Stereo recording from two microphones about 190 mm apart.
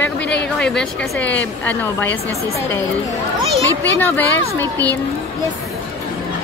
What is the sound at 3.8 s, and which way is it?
Speech, 10° left (ahead or behind).